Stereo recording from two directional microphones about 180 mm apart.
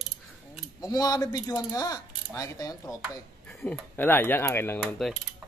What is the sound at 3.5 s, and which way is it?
Speech, 5° left (ahead or behind).